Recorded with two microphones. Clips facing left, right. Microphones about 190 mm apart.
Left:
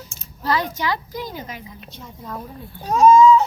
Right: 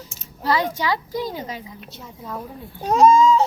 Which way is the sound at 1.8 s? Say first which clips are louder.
Even; 5° right (ahead or behind).